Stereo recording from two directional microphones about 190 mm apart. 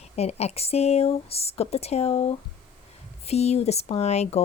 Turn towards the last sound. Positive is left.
turn(degrees=35)  # may be behind; listen again after turning